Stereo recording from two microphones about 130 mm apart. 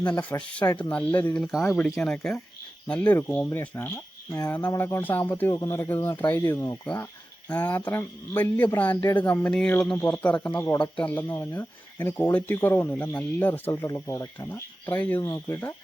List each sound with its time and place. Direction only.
0.1 s speech: 10° left (ahead or behind)
4.3 s speech: 25° left (ahead or behind)
6.8 s speech: 10° left (ahead or behind)